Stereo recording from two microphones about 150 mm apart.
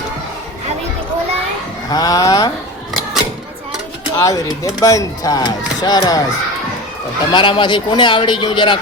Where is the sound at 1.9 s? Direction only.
25° left (ahead or behind).